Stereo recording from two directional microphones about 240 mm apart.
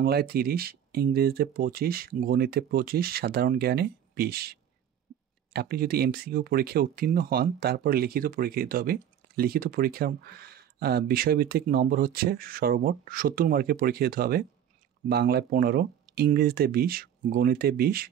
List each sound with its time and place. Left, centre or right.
0.0 s speech: right